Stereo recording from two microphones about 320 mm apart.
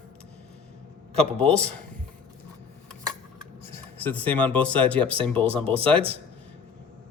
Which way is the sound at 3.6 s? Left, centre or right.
Centre.